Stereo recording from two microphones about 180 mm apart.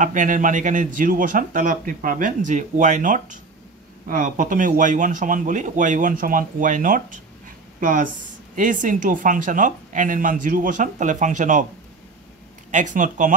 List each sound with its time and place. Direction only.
0.0 s a man's voice: 45° right (ahead or behind)
12.7 s a man's voice: 45° right (ahead or behind)